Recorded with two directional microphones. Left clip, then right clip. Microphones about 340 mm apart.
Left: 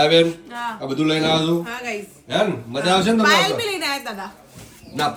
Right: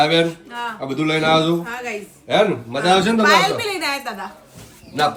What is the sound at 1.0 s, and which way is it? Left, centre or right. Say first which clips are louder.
Speech: even; right.